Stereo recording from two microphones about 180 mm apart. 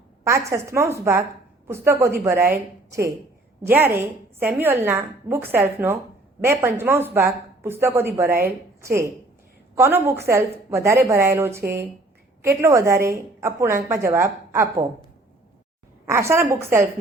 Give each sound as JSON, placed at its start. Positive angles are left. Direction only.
{"t": 0.3, "sound": "a woman's voice", "side_deg": -15}
{"t": 3.6, "sound": "a woman's voice", "side_deg": -10}
{"t": 16.0, "sound": "a woman's voice", "side_deg": -15}